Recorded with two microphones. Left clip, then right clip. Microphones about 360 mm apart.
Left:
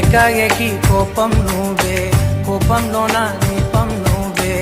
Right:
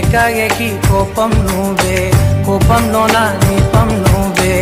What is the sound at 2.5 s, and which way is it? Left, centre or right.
Music, right.